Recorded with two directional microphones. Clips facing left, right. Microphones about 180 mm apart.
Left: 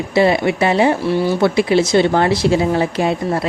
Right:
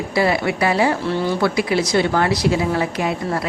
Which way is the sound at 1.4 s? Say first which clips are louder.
Left 5 dB; 25° left (ahead or behind).